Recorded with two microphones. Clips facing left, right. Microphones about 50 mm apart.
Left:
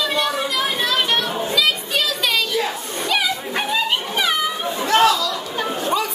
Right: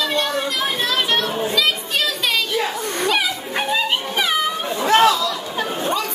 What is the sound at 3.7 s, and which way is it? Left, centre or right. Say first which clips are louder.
Dog: right 1 dB; centre.